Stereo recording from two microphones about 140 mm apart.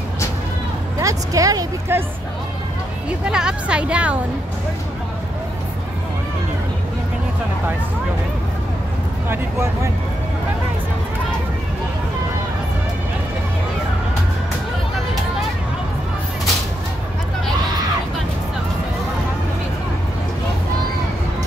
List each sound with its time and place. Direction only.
0.9 s speech: 25° right (ahead or behind)
3.3 s speech: 5° right (ahead or behind)